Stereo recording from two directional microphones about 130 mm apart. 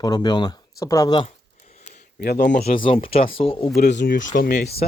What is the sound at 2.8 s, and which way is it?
Speech, 45° left (ahead or behind).